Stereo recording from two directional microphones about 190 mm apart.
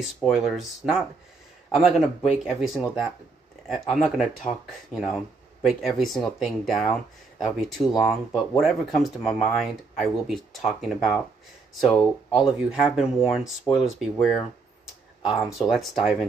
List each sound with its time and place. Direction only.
0.0 s speech: centre (ahead or behind)
15.2 s speech: centre (ahead or behind)